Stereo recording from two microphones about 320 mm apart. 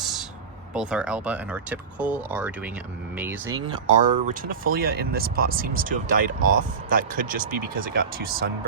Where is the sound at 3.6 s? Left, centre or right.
Right.